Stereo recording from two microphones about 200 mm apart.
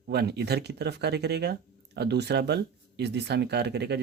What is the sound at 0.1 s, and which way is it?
Speech, 55° right (ahead or behind).